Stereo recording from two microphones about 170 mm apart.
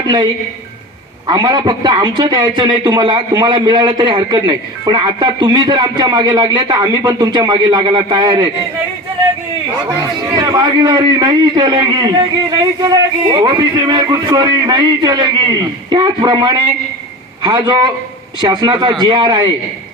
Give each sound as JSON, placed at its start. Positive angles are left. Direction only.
{"t": 1.3, "sound": "a man's voice", "side_deg": -25}
{"t": 10.3, "sound": "a man's voice", "side_deg": -25}